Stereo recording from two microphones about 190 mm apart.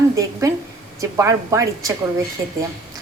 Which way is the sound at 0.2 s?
15° right (ahead or behind).